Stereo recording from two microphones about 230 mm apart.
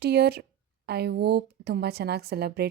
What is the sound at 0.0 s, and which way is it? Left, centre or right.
A woman's voice, right.